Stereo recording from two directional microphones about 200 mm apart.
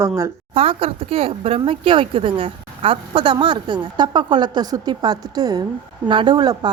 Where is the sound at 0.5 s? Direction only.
30° right (ahead or behind).